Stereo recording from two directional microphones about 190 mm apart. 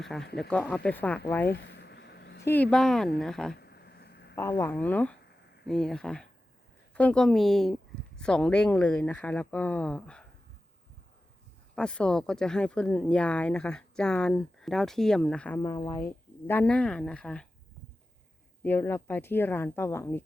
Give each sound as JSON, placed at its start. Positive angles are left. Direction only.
{"t": 0.0, "sound": "speech", "side_deg": 0}
{"t": 1.5, "sound": "a sound", "side_deg": 65}
{"t": 2.4, "sound": "speech", "side_deg": 10}
{"t": 3.6, "sound": "a sound", "side_deg": 60}
{"t": 4.4, "sound": "speech", "side_deg": 15}
{"t": 11.7, "sound": "speech", "side_deg": 5}
{"t": 18.6, "sound": "speech", "side_deg": 10}